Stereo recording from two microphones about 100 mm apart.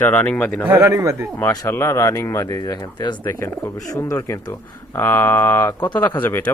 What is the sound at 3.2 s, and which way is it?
Speech, 25° left (ahead or behind).